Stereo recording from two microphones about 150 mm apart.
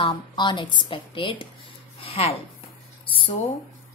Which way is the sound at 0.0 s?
30° left (ahead or behind).